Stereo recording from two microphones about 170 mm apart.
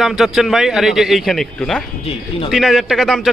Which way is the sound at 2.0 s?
35° left (ahead or behind).